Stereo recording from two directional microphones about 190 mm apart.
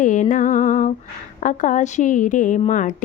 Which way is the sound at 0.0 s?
40° left (ahead or behind).